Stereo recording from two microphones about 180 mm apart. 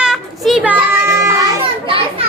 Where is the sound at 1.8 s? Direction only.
30° right (ahead or behind).